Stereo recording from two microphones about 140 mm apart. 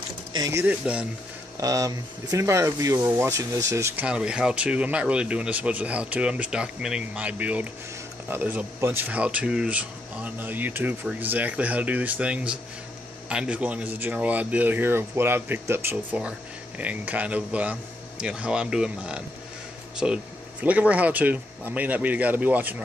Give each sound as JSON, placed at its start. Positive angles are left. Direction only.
{"t": 0.5, "sound": "speech", "side_deg": -15}
{"t": 1.6, "sound": "speech", "side_deg": -25}
{"t": 4.0, "sound": "speech", "side_deg": -5}